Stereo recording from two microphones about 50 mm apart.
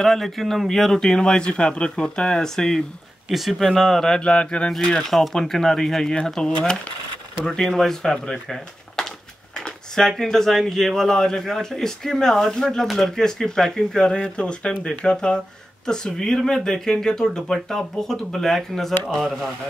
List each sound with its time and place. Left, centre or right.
0.0 s a man's voice: centre
3.3 s a man's voice: centre; by 4.7 s left
5.1 s a man's voice: centre